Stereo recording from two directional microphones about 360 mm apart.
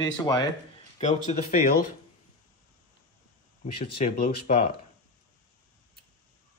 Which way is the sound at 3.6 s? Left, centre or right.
Left.